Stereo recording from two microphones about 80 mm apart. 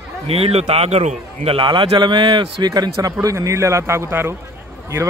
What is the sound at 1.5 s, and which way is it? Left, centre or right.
Speech, right.